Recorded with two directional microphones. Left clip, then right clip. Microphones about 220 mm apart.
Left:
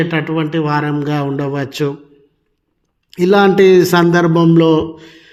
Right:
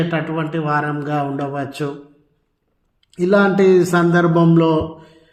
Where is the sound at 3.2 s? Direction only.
45° left (ahead or behind).